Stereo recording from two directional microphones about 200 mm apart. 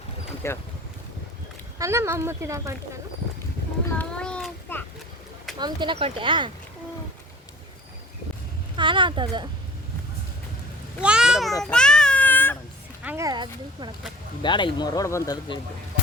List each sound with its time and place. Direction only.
0.4 s speech: 15° left (ahead or behind)
1.8 s speech: 15° right (ahead or behind)
3.8 s a sound: 5° left (ahead or behind)
5.5 s speech: 20° right (ahead or behind)
8.7 s speech: 25° right (ahead or behind)
11.0 s speech: 5° right (ahead or behind)
11.6 s a sound: 5° left (ahead or behind)
13.0 s speech: 10° right (ahead or behind)
14.4 s speech: 25° left (ahead or behind)